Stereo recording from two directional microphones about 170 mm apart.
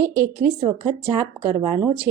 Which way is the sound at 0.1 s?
15° right (ahead or behind).